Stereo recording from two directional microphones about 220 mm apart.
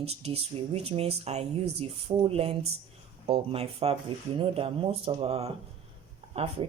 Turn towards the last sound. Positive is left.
turn(degrees=-25)  # may be behind; listen again after turning